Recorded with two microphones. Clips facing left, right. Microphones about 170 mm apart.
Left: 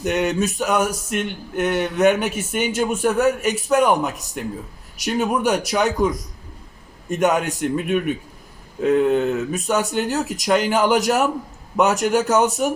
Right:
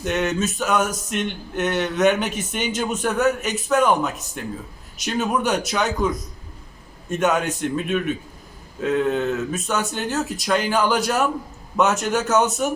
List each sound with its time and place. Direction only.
0.0 s speech: 15° left (ahead or behind)